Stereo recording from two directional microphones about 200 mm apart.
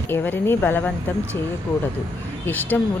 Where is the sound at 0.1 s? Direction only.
10° left (ahead or behind).